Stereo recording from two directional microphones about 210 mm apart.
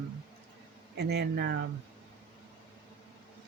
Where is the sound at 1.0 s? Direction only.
50° right (ahead or behind).